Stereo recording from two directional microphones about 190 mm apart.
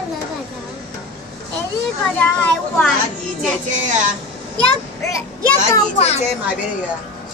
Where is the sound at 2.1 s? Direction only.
5° left (ahead or behind).